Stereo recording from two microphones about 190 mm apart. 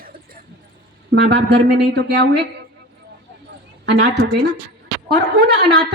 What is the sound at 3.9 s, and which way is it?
A woman's voice, 60° right (ahead or behind).